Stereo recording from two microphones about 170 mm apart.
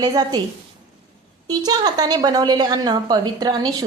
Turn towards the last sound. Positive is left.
turn(degrees=-25)  # may be behind; listen again after turning